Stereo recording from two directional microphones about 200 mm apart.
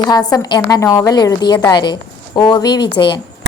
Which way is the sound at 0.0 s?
20° left (ahead or behind).